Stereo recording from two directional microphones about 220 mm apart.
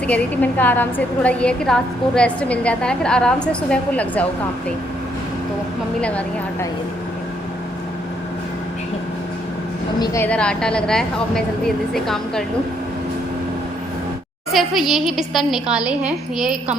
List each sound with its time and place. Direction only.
0.1 s a woman's voice: 10° left (ahead or behind)
6.0 s a woman's voice: 5° left (ahead or behind)
10.0 s a woman's voice: 15° left (ahead or behind)
14.5 s a woman's voice: centre (ahead or behind)